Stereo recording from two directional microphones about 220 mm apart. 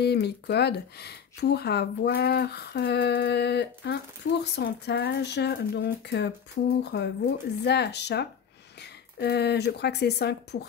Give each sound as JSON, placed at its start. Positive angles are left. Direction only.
{"t": 0.0, "sound": "speech", "side_deg": 50}